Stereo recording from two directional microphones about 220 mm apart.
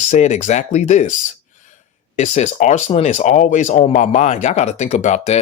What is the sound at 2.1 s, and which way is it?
Speech, 30° left (ahead or behind).